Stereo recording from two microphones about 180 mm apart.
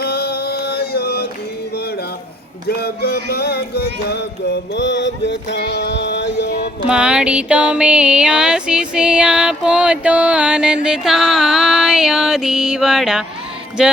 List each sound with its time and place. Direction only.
0.0 s a sound: 60° left (ahead or behind)
2.6 s music: 60° left (ahead or behind)
6.8 s music: 5° right (ahead or behind)